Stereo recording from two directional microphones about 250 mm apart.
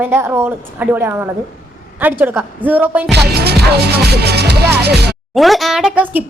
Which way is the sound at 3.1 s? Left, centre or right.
Right.